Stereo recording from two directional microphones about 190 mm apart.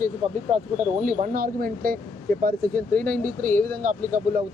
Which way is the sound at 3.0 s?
45° right (ahead or behind).